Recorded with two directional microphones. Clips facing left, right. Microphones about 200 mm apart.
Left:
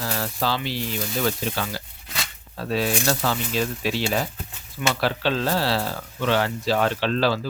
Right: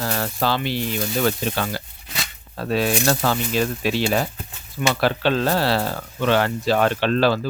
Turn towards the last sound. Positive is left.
turn(degrees=-55)  # may be behind; listen again after turning